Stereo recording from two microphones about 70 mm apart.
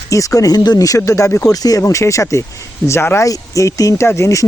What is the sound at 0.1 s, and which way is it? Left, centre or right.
Speech, left.